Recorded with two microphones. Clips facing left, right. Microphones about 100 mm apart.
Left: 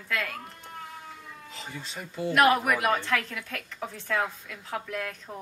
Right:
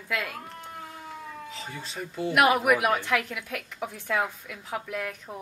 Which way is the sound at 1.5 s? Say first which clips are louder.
Right 2 dB; centre (ahead or behind).